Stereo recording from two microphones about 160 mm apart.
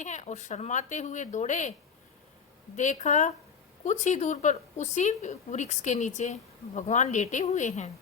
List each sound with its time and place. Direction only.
0.0 s a woman's voice: 50° left (ahead or behind)
2.7 s a woman's voice: 50° left (ahead or behind)